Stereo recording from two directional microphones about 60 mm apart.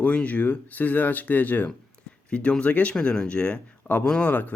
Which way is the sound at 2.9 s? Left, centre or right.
Centre.